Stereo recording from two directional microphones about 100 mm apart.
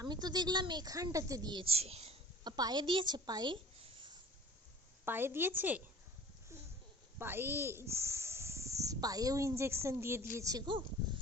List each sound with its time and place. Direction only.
0.0 s speech: 45° right (ahead or behind)
1.6 s speech: 90° right
2.4 s speech: 45° right (ahead or behind)
5.0 s a woman's voice: 20° right (ahead or behind)
7.2 s speech: 20° right (ahead or behind)